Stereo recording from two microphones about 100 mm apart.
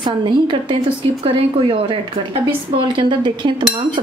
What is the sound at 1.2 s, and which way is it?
Speech, 70° right (ahead or behind).